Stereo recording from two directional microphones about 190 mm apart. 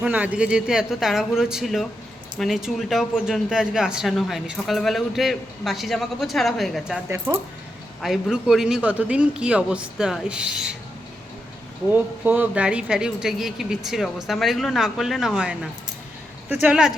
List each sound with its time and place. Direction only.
0.0 s speech: 5° right (ahead or behind)
7.3 s speech: 20° right (ahead or behind)
8.0 s speech: centre (ahead or behind)
11.9 s speech: 10° right (ahead or behind)